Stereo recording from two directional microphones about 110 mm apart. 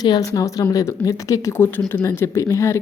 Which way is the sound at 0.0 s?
35° left (ahead or behind).